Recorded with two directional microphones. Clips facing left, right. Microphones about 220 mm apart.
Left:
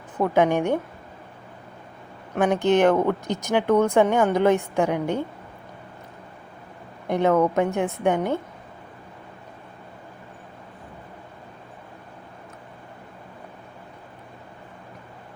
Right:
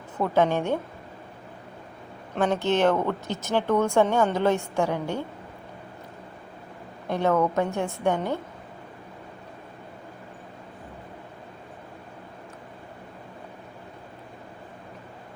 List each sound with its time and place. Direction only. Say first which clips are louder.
0.2 s speech: left 3 dB; 15° left (ahead or behind)
2.3 s speech: left 4 dB; 15° left (ahead or behind)
7.1 s speech: left 3 dB; 15° left (ahead or behind)